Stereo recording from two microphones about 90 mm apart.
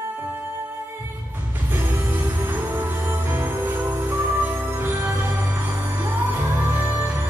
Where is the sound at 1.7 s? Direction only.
20° right (ahead or behind).